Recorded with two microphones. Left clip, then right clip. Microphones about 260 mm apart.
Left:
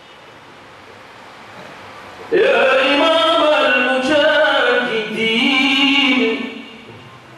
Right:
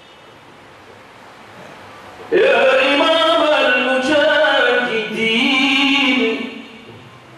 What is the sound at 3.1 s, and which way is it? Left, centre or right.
Music, centre.